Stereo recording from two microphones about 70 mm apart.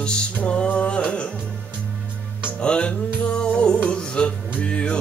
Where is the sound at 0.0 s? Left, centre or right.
Centre.